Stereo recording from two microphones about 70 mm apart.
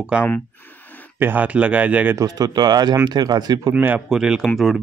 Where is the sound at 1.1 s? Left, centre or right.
Right.